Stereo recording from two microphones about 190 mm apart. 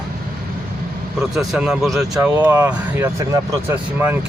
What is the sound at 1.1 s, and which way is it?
Speech, centre (ahead or behind).